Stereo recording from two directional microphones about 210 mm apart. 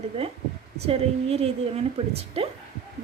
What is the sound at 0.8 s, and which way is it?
A woman's voice, 30° right (ahead or behind).